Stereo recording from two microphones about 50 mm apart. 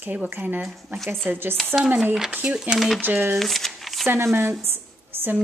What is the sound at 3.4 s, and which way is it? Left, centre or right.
Shuffling cards, centre.